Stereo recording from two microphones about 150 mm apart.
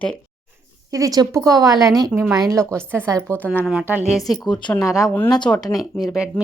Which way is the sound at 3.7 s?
10° right (ahead or behind).